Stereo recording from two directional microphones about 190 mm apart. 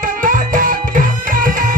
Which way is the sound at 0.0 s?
45° right (ahead or behind).